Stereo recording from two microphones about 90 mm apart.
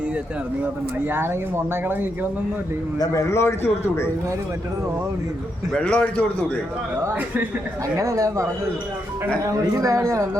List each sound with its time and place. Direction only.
1.1 s speech: 25° right (ahead or behind)
3.1 s a man's voice: 30° left (ahead or behind)
5.7 s a man's voice: 10° left (ahead or behind)
6.9 s speech: 25° right (ahead or behind)
7.9 s speech: 35° right (ahead or behind)